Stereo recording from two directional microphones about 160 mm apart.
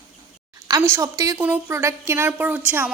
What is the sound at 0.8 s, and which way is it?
A woman's voice, 15° right (ahead or behind).